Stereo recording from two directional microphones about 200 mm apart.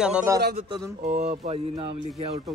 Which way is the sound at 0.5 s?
25° right (ahead or behind).